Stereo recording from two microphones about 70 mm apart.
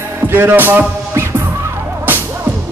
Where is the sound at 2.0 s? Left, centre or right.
Right.